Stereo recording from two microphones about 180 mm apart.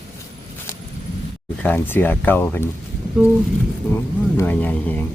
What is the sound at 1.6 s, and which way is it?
Speech, 10° left (ahead or behind).